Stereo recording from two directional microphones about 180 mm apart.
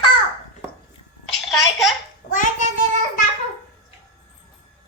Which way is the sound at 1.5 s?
Centre (ahead or behind).